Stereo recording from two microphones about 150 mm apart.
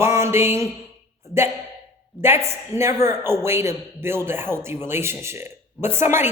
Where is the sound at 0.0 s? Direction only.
15° right (ahead or behind).